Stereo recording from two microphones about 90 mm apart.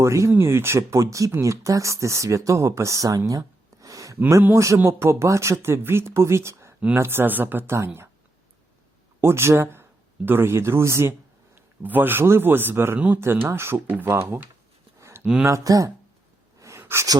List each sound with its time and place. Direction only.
0.0 s a man's voice: 30° right (ahead or behind)
9.2 s a man's voice: 30° right (ahead or behind)
11.5 s a man's voice: 20° right (ahead or behind)
14.9 s a sound: 30° right (ahead or behind)
15.4 s speech: 35° right (ahead or behind)
16.6 s a sound: 35° right (ahead or behind)